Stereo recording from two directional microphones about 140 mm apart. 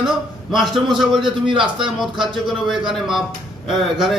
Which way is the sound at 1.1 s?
35° right (ahead or behind).